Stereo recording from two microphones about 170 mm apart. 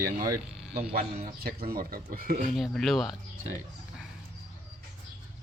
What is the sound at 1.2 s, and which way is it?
Speech, 60° right (ahead or behind).